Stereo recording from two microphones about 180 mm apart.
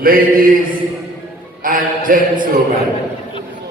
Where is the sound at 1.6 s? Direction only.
50° right (ahead or behind).